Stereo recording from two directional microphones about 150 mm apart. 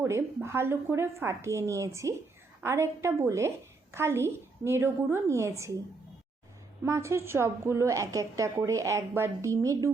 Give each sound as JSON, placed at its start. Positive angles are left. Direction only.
{"t": 0.0, "sound": "a sound", "side_deg": -15}
{"t": 0.4, "sound": "a woman's voice", "side_deg": -15}
{"t": 6.8, "sound": "a woman's voice", "side_deg": -20}